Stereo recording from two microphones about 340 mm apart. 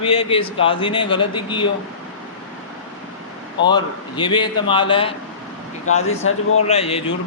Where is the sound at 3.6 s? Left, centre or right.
Centre.